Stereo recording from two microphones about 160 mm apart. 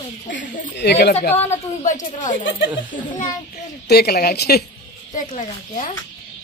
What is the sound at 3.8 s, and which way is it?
Speech, 80° left.